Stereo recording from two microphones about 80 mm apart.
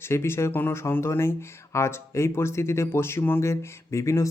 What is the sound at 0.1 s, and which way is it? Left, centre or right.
Speech, left.